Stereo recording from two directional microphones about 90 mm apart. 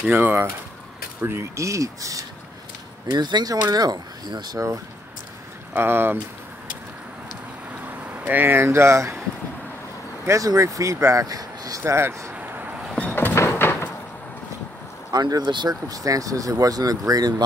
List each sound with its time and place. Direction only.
0.0 s speech: 20° right (ahead or behind); by 2.2 s 40° right (ahead or behind)
3.1 s speech: 50° right (ahead or behind)
5.7 s speech: 25° right (ahead or behind)
8.1 s speech: 20° right (ahead or behind)
10.2 s speech: 35° right (ahead or behind)
11.8 s speech: 30° right (ahead or behind)
12.4 s a sound: 15° right (ahead or behind)
12.9 s door: 20° left (ahead or behind)
15.0 s speech: 50° right (ahead or behind)
15.7 s speech: 40° right (ahead or behind)